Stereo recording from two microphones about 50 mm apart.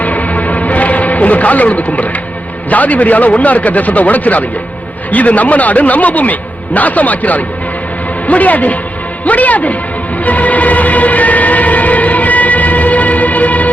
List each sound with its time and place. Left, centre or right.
0.0 s music: left
2.6 s a man's voice: left
10.2 s siren: left